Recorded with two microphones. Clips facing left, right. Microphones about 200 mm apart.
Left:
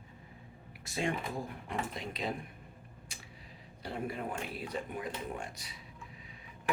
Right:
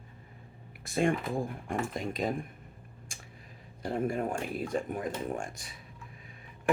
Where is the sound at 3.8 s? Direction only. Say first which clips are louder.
Right 7 dB; 45° right (ahead or behind).